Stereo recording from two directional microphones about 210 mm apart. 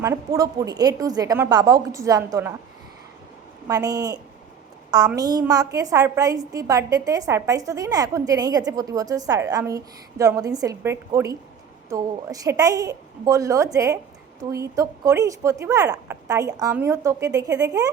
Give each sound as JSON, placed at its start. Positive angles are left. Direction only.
{"t": 0.0, "sound": "a woman's voice", "side_deg": -15}
{"t": 3.7, "sound": "a woman's voice", "side_deg": -15}